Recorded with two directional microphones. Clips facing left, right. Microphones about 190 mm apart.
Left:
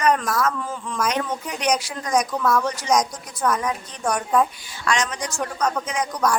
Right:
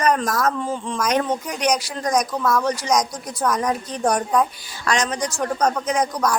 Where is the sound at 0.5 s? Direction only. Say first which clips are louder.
Right 4 dB; 25° right (ahead or behind).